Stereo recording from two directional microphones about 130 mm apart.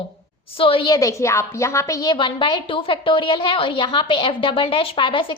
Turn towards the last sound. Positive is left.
turn(degrees=40)  # may be behind; listen again after turning